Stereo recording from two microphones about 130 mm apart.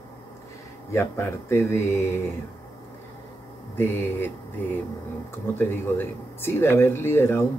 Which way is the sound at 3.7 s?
15° left (ahead or behind).